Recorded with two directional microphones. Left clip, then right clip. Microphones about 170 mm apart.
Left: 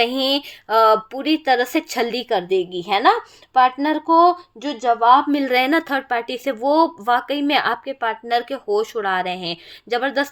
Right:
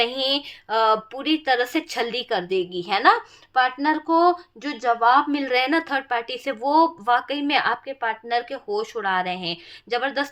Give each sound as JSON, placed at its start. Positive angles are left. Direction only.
{"t": 0.0, "sound": "speech", "side_deg": 40}